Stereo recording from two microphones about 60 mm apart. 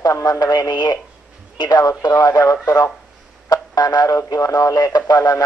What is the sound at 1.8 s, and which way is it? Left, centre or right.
Speech, left.